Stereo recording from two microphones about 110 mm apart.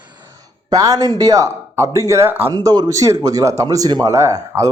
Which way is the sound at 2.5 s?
35° right (ahead or behind).